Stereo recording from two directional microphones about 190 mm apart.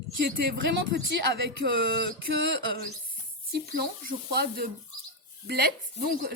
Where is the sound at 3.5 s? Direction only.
55° right (ahead or behind).